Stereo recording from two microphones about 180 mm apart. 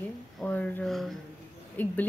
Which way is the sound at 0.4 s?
10° left (ahead or behind).